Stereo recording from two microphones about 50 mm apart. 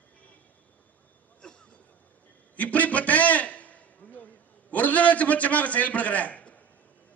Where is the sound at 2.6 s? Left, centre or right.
Left.